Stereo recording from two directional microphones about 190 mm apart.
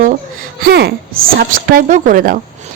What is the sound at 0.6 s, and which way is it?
A woman's voice, 60° right (ahead or behind).